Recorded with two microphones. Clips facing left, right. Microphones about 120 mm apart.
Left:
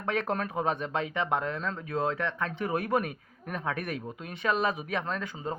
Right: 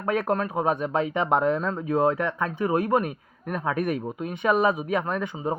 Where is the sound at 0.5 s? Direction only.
10° right (ahead or behind).